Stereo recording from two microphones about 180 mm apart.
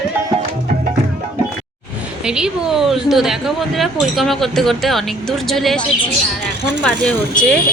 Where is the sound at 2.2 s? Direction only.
5° right (ahead or behind).